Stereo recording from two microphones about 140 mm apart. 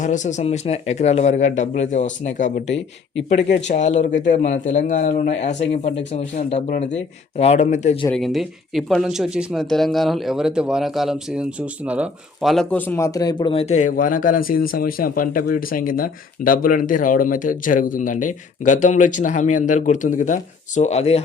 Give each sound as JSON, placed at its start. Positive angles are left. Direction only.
{"t": 0.0, "sound": "speech", "side_deg": 60}
{"t": 8.1, "sound": "speech", "side_deg": 0}
{"t": 12.7, "sound": "a man's voice", "side_deg": 10}
{"t": 13.1, "sound": "speech", "side_deg": 25}
{"t": 13.5, "sound": "speech", "side_deg": 50}